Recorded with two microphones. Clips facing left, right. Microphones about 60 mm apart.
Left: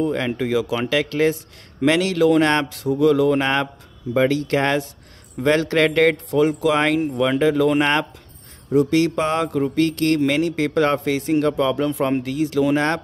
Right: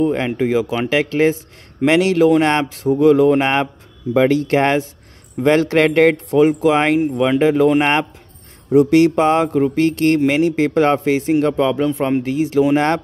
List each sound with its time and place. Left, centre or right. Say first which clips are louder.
0.1 s mantra: right 4 dB; right
2.8 s mantra: right 6 dB; right
4.1 s speech: right 4 dB; right
7.8 s mantra: right 3 dB; right